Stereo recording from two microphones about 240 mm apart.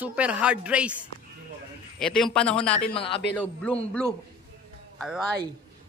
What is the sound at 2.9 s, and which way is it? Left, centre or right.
Speech, left.